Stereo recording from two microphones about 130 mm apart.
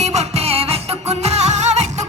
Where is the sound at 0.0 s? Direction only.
55° right (ahead or behind).